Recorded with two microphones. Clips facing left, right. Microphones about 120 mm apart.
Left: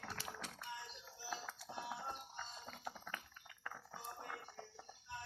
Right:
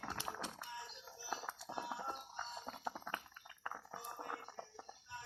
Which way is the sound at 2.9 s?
30° right (ahead or behind).